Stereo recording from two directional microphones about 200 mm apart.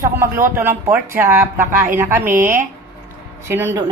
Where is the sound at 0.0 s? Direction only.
15° right (ahead or behind).